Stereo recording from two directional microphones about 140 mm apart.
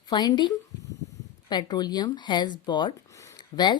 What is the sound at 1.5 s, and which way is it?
A woman's voice, 30° left (ahead or behind).